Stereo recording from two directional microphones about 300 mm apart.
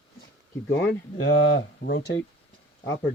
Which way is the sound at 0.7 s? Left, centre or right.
Left.